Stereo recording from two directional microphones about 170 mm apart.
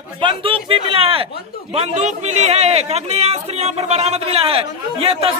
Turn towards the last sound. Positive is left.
turn(degrees=-35)  # may be behind; listen again after turning